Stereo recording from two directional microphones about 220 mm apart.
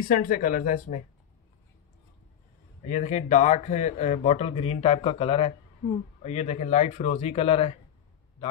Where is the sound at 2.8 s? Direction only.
35° left (ahead or behind).